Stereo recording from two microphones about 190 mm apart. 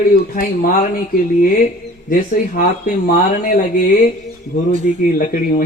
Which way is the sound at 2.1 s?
50° left (ahead or behind).